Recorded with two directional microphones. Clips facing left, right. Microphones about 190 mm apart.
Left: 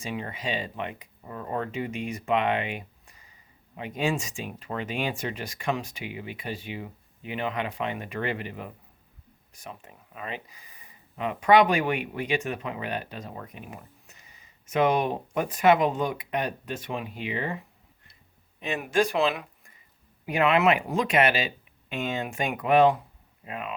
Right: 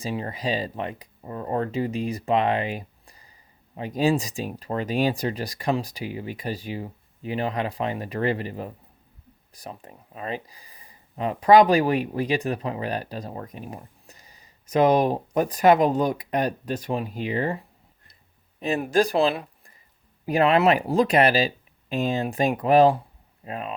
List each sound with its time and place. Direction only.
0.0 s speech: 35° right (ahead or behind)
18.6 s speech: 35° right (ahead or behind)